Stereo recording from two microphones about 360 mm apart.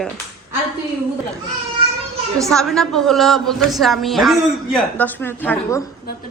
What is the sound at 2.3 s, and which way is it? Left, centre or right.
A man's voice, centre.